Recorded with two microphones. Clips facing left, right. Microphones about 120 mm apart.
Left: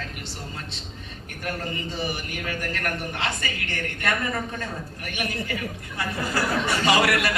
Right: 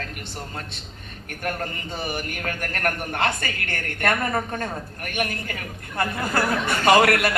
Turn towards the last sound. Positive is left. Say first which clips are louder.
# right 4 dB
turn(degrees=-50)  # may be behind; listen again after turning